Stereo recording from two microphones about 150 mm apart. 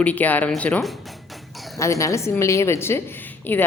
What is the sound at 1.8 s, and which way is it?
A woman's voice, 20° left (ahead or behind).